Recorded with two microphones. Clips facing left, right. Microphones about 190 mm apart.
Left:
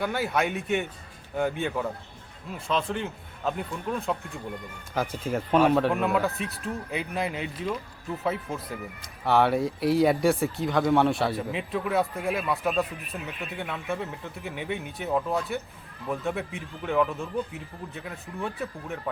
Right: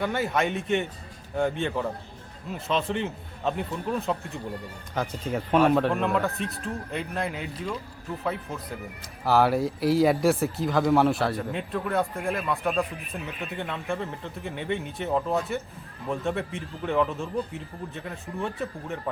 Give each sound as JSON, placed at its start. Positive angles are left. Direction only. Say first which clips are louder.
{"t": 0.0, "sound": "speech", "louder": "right 1 dB", "side_deg": 0}